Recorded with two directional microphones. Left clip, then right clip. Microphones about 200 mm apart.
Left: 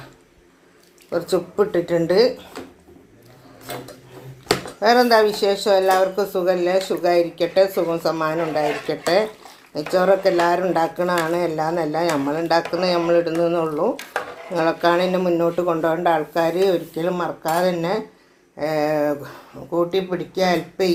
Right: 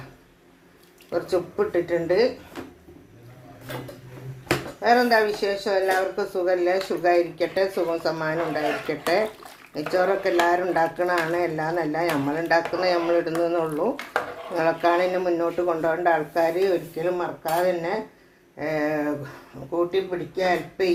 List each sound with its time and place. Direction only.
1.1 s speech: 25° left (ahead or behind)
4.4 s speech: 35° left (ahead or behind)